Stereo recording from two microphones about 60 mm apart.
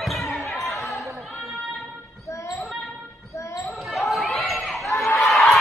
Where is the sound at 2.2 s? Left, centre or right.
Left.